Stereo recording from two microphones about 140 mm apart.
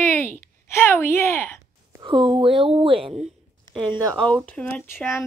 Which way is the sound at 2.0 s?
35° right (ahead or behind).